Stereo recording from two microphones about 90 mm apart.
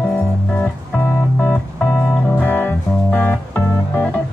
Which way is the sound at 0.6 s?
20° left (ahead or behind).